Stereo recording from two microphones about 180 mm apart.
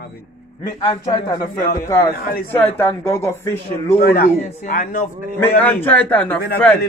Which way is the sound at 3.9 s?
55° left (ahead or behind).